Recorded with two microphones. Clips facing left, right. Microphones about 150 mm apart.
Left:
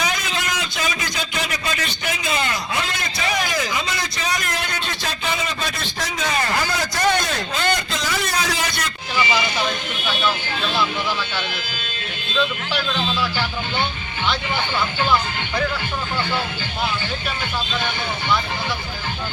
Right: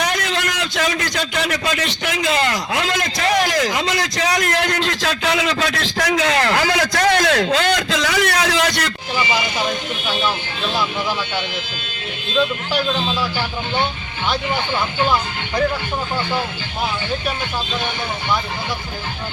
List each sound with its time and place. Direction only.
0.0 s a man's voice: 70° right (ahead or behind)